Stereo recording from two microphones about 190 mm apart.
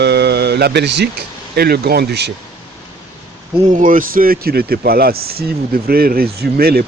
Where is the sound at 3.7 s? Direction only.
45° right (ahead or behind).